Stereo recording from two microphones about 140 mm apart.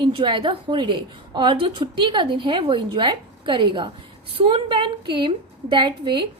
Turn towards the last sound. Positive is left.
turn(degrees=-35)  # may be behind; listen again after turning